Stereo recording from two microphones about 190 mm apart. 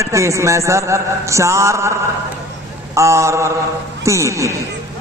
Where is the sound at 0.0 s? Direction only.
15° right (ahead or behind).